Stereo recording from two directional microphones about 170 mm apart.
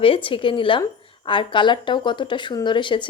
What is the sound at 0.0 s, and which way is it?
A woman's voice, 30° left (ahead or behind).